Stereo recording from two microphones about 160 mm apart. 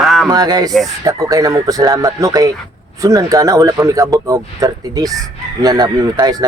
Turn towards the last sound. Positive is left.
turn(degrees=-25)  # may be behind; listen again after turning